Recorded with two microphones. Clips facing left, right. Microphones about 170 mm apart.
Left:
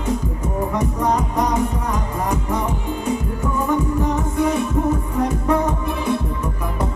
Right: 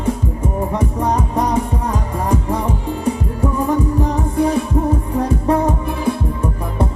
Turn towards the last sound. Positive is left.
turn(degrees=-30)  # may be behind; listen again after turning